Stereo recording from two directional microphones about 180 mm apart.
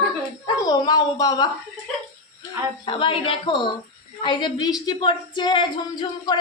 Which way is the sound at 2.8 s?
25° left (ahead or behind).